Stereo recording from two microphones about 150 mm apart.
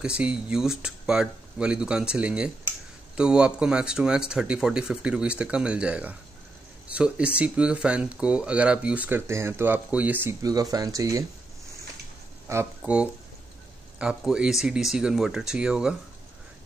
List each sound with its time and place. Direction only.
0.0 s speech: 5° right (ahead or behind)
10.4 s speech: 25° right (ahead or behind)
12.4 s speech: 15° right (ahead or behind)